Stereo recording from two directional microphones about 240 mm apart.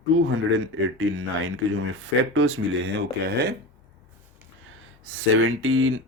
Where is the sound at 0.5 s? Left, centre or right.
Right.